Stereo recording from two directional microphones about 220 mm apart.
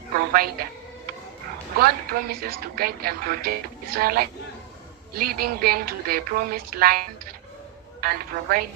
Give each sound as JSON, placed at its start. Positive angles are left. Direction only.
{"t": 0.3, "sound": "a woman's voice", "side_deg": -40}
{"t": 1.8, "sound": "a woman's voice", "side_deg": -45}